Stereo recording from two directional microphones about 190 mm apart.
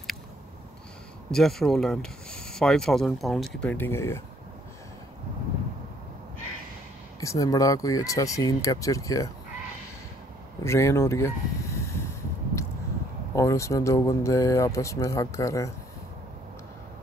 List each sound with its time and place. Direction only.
1.3 s speech: centre (ahead or behind)
7.2 s speech: 15° left (ahead or behind)
10.6 s a sound: 15° left (ahead or behind)
13.3 s speech: 15° left (ahead or behind)